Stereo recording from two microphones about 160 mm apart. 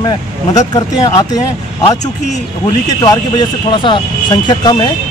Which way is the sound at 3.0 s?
25° left (ahead or behind).